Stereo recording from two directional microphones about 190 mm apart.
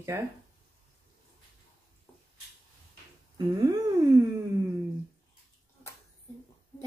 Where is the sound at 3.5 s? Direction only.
20° right (ahead or behind).